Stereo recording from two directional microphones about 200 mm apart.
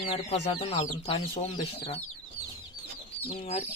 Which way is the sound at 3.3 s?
30° left (ahead or behind).